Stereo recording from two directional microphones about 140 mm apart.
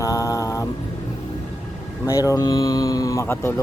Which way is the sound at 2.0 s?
25° left (ahead or behind).